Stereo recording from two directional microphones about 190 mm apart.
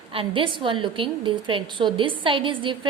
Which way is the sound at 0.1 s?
25° right (ahead or behind).